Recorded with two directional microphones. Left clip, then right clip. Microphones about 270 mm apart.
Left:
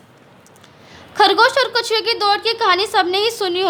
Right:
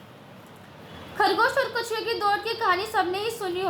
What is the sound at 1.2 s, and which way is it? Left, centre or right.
A woman's voice, left.